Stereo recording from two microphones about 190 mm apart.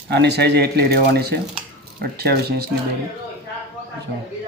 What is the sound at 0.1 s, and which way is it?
Speech, 60° right (ahead or behind).